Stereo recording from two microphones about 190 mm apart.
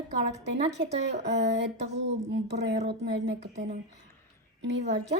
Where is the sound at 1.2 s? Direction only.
65° right (ahead or behind).